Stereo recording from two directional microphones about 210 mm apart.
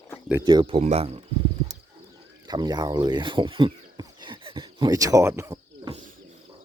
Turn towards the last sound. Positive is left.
turn(degrees=-35)  # may be behind; listen again after turning